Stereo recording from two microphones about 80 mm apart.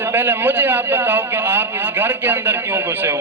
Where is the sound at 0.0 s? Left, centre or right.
Right.